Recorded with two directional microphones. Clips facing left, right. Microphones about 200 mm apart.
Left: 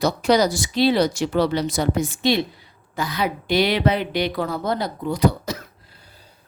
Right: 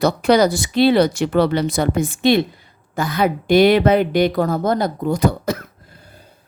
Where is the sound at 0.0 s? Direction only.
55° right (ahead or behind).